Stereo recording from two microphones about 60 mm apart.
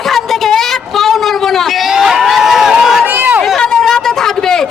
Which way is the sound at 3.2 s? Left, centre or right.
Right.